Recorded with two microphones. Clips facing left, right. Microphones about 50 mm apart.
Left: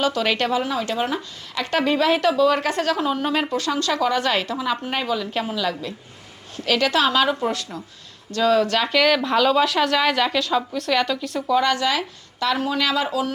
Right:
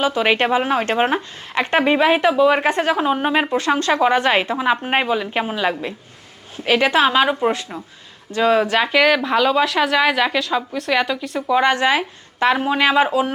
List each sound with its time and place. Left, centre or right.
0.0 s speech: right; by 11.3 s centre
11.3 s speech: right